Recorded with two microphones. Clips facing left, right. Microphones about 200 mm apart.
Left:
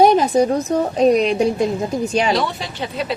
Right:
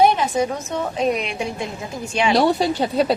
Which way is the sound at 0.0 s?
40° left (ahead or behind).